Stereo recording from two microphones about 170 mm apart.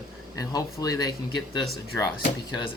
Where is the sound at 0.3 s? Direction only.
20° left (ahead or behind).